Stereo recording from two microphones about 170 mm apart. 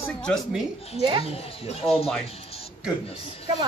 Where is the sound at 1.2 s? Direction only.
35° left (ahead or behind).